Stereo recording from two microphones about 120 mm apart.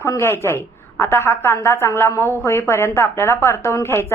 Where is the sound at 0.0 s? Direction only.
20° left (ahead or behind).